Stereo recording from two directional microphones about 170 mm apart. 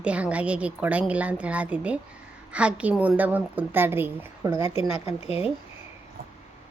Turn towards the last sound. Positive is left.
turn(degrees=35)  # may be behind; listen again after turning